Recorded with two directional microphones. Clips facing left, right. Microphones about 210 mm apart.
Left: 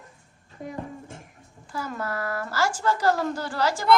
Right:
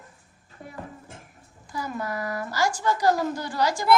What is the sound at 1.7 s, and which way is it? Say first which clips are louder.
A woman's voice: even; 15° right (ahead or behind).